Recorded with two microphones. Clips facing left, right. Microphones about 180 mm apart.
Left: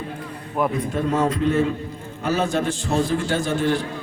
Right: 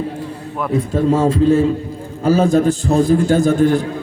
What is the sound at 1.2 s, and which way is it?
Speech, 30° right (ahead or behind).